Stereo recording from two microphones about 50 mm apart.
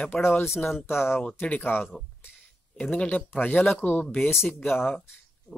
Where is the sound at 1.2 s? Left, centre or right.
Left.